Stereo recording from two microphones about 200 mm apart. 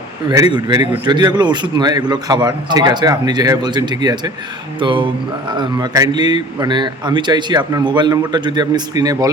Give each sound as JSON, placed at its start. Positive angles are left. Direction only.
{"t": 0.3, "sound": "a man's voice", "side_deg": -20}